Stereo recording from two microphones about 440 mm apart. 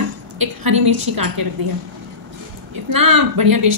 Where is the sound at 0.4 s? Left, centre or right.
Right.